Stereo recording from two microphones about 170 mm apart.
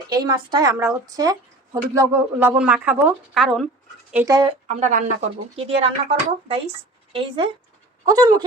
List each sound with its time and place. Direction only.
0.1 s a woman's voice: 25° right (ahead or behind); by 3.7 s centre (ahead or behind)
4.3 s a woman's voice: 25° right (ahead or behind)
4.7 s speech: 45° right (ahead or behind)
5.5 s speech: 35° right (ahead or behind)
8.0 s a woman's voice: 25° right (ahead or behind)